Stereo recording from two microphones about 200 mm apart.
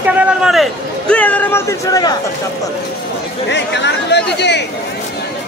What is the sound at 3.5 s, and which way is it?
Speech, 60° left (ahead or behind).